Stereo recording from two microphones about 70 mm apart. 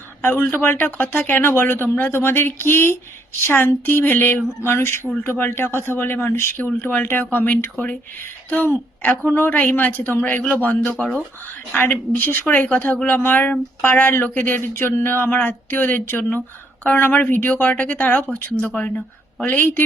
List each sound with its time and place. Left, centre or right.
0.2 s speech: left
10.9 s speech: centre
11.7 s speech: left